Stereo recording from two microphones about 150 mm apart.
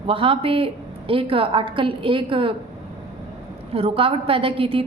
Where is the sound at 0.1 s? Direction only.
35° right (ahead or behind).